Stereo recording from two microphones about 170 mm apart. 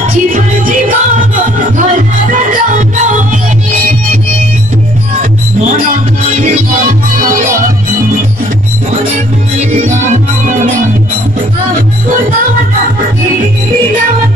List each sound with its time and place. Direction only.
0.3 s music: 50° right (ahead or behind)
2.3 s music: 50° right (ahead or behind)
9.6 s music: 40° right (ahead or behind)